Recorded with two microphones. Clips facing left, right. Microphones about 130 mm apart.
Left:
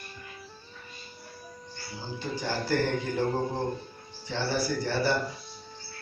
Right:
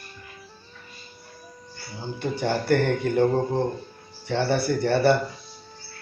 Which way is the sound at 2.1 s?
60° right (ahead or behind).